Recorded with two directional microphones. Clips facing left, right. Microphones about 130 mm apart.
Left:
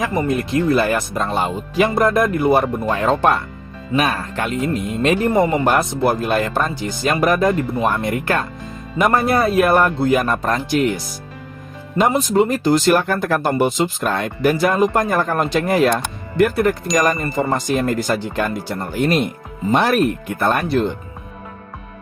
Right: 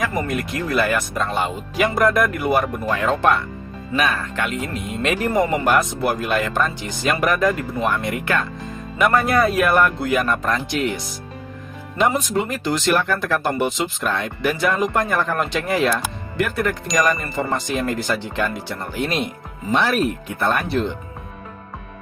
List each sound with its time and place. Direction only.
0.0 s speech: 25° left (ahead or behind); by 10.9 s 45° left (ahead or behind)
11.9 s speech: 40° left (ahead or behind)